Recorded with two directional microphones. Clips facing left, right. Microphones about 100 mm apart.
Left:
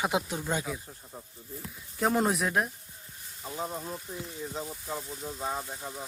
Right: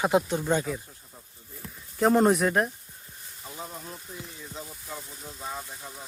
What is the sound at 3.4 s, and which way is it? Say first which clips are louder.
Speech: left 5 dB; 25° left (ahead or behind).